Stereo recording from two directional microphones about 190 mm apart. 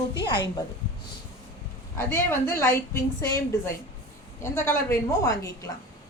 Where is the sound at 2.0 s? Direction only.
15° left (ahead or behind).